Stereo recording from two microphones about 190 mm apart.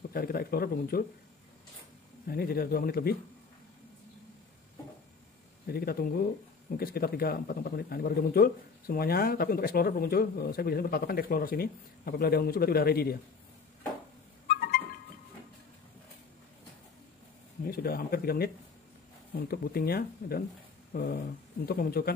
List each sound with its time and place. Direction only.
0.1 s speech: 50° left (ahead or behind)
2.2 s speech: 55° left (ahead or behind)
5.7 s speech: 55° left (ahead or behind)
14.5 s music: 50° left (ahead or behind)
17.6 s speech: 50° left (ahead or behind)